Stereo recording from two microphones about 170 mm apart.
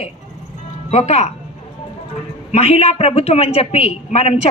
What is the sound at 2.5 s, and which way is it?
A man's voice, 35° left (ahead or behind).